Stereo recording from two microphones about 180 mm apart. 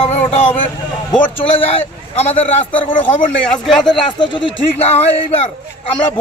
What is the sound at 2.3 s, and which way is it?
A man's voice, 10° left (ahead or behind).